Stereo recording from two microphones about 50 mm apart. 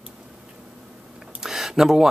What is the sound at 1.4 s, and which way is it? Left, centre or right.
Speech, centre.